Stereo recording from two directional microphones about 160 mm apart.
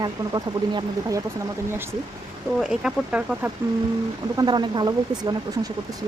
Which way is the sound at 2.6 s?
5° right (ahead or behind).